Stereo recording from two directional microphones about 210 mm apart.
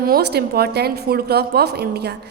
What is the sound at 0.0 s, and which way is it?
A woman's voice, 50° right (ahead or behind).